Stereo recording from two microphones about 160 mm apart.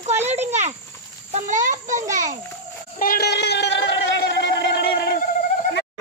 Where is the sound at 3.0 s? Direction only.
75° left (ahead or behind); by 5.1 s 90° left.